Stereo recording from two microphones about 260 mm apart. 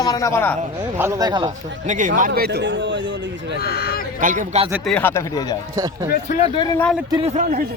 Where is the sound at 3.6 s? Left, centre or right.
Left.